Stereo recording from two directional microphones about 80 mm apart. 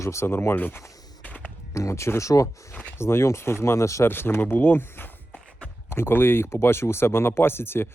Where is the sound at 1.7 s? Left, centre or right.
Left.